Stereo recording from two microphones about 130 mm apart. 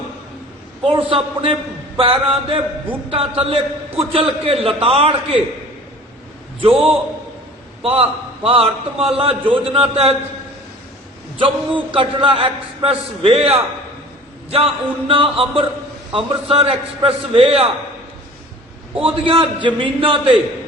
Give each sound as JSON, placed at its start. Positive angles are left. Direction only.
{"t": 0.9, "sound": "a man's voice", "side_deg": -45}
{"t": 6.6, "sound": "a man's voice", "side_deg": -45}
{"t": 11.3, "sound": "a man's voice", "side_deg": -40}
{"t": 19.0, "sound": "a man's voice", "side_deg": -45}